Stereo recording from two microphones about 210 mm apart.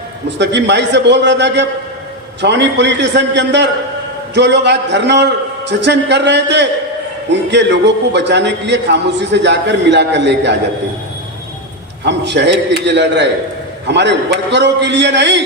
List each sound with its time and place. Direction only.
0.3 s a man's voice: 55° right (ahead or behind)
12.0 s a man's voice: 55° right (ahead or behind)